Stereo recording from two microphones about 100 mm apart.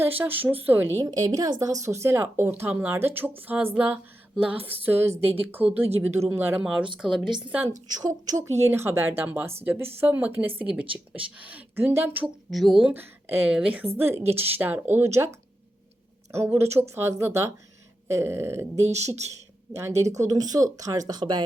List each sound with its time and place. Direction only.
0.2 s speech: 20° right (ahead or behind)
1.0 s speech: 40° right (ahead or behind)
6.7 s speech: 10° right (ahead or behind)
7.9 s speech: 40° right (ahead or behind); by 12.3 s 20° right (ahead or behind)
12.5 s speech: centre (ahead or behind)
12.8 s speech: 20° right (ahead or behind)
13.9 s speech: 20° right (ahead or behind)
18.9 s speech: 90° right
19.7 s speech: 25° right (ahead or behind); by 21.4 s 50° right (ahead or behind)